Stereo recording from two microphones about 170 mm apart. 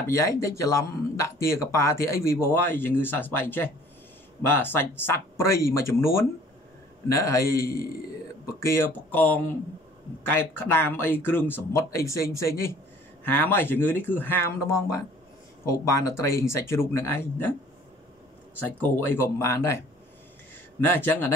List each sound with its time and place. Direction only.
0.0 s speech: 15° left (ahead or behind)
7.7 s a man's voice: 60° left (ahead or behind)
8.5 s speech: 15° left (ahead or behind)
18.6 s speech: 10° left (ahead or behind)
20.8 s speech: 10° left (ahead or behind)